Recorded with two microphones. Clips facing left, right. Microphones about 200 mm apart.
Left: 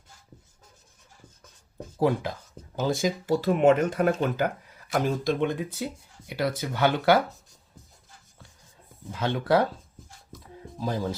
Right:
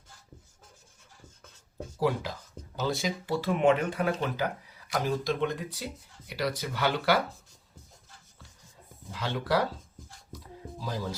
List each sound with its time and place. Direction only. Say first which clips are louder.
2.0 s speech: left 4 dB; 55° left (ahead or behind)
9.1 s speech: left 5 dB; 55° left (ahead or behind)
10.8 s speech: left 6 dB; 50° left (ahead or behind)